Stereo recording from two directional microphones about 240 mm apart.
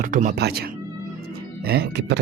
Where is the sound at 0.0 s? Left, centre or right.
Right.